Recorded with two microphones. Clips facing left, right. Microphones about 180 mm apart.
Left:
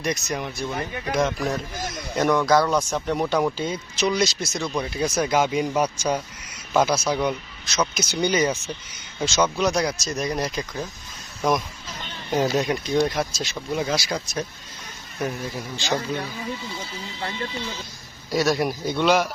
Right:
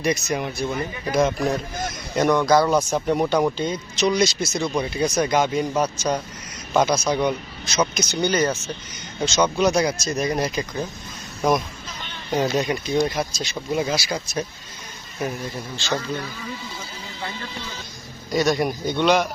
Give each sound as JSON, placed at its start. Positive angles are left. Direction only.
{"t": 0.0, "sound": "speech", "side_deg": -5}
{"t": 12.3, "sound": "speech", "side_deg": 5}
{"t": 15.5, "sound": "a man's voice", "side_deg": 15}
{"t": 18.3, "sound": "speech", "side_deg": 0}